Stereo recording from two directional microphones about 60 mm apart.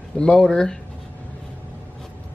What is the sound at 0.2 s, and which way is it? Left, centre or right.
Speech, centre.